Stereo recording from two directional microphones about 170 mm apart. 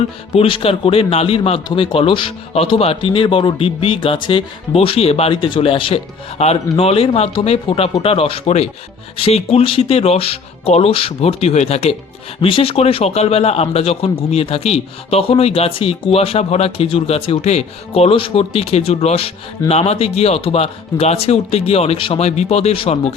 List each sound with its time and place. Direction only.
0.0 s a man's voice: 35° left (ahead or behind)